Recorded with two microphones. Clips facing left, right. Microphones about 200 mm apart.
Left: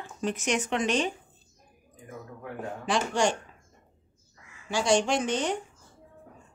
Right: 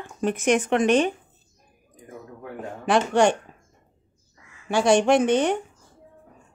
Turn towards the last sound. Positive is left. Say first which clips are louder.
# right 8 dB
turn(degrees=-60)  # may be behind; listen again after turning